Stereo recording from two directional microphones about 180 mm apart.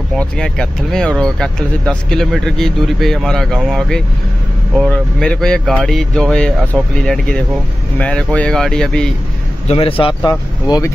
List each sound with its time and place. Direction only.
0.1 s speech: 5° left (ahead or behind)
9.7 s speech: 30° left (ahead or behind)